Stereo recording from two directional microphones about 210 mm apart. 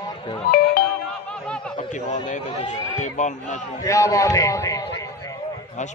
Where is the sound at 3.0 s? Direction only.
35° left (ahead or behind).